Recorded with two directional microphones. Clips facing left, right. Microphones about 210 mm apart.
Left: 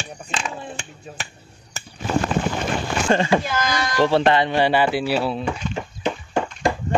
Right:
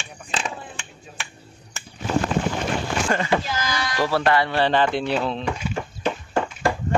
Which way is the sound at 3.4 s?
55° left (ahead or behind).